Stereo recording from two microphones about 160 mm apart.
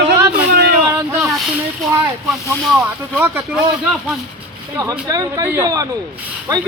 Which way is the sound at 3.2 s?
10° right (ahead or behind).